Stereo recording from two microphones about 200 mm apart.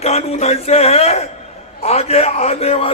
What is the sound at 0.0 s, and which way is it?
A man's voice, 30° left (ahead or behind).